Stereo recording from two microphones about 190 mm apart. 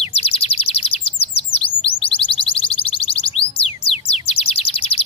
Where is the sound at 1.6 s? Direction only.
30° left (ahead or behind).